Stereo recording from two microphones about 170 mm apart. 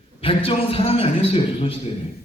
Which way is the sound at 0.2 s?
30° left (ahead or behind).